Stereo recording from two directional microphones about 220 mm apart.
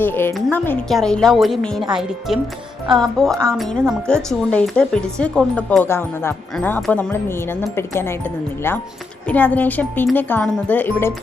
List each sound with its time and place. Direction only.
0.0 s a woman's voice: 10° left (ahead or behind)